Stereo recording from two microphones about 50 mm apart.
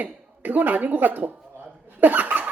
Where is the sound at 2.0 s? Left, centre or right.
Right.